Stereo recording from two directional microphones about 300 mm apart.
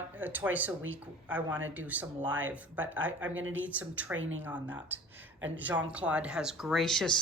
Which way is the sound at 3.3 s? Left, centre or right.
Right.